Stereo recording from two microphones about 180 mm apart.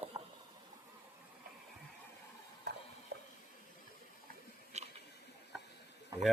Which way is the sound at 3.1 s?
60° right (ahead or behind).